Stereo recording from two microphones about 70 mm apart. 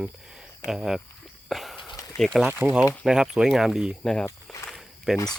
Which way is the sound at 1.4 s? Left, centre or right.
Centre.